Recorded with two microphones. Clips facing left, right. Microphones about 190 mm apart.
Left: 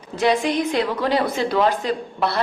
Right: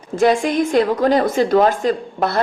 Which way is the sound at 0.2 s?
45° right (ahead or behind).